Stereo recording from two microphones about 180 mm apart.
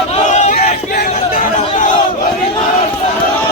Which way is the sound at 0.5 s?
55° left (ahead or behind).